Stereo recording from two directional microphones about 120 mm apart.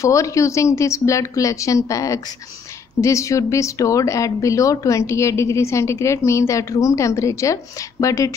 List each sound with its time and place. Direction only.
0.0 s speech: 25° left (ahead or behind)